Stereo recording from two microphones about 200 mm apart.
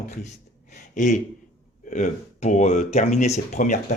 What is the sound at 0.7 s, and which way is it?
Speech, 40° left (ahead or behind).